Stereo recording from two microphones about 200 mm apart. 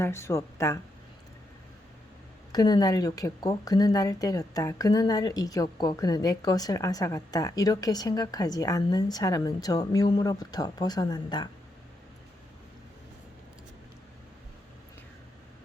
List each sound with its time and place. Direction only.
0.0 s speech: 15° left (ahead or behind)
2.5 s speech: 20° left (ahead or behind)